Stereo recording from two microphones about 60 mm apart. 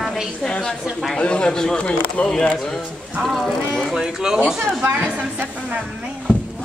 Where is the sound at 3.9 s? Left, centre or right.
Centre.